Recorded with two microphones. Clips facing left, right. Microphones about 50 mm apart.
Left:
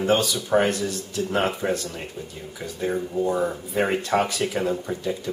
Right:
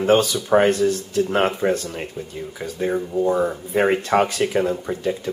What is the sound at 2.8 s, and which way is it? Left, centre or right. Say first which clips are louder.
Speech: right 4 dB; centre.